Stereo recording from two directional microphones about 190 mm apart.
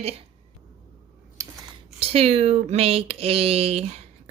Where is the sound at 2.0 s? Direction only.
30° right (ahead or behind).